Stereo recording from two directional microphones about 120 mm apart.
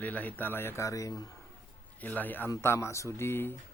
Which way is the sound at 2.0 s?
15° left (ahead or behind).